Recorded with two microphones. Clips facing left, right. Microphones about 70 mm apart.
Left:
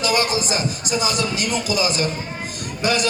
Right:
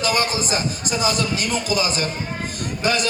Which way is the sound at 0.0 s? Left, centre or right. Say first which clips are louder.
Left 1 dB; right.